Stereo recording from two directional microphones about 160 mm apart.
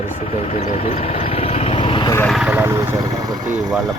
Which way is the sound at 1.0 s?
40° left (ahead or behind).